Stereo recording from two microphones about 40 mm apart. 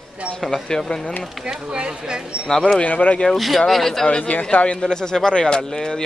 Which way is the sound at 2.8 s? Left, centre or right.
Left.